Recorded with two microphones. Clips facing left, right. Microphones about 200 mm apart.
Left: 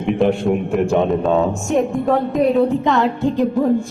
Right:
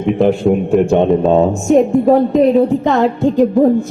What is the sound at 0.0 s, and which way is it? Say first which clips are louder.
Speech: right 4 dB; centre (ahead or behind).